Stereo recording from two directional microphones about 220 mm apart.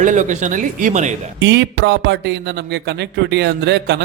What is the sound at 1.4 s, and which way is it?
Speech, 50° right (ahead or behind).